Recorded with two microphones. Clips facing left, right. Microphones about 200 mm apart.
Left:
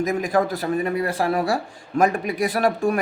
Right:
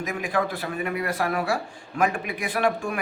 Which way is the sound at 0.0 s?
40° left (ahead or behind).